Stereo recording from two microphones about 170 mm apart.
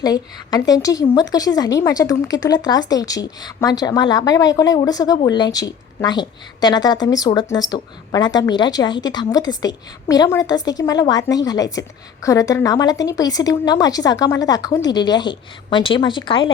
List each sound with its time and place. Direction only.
0.0 s speech: 20° left (ahead or behind)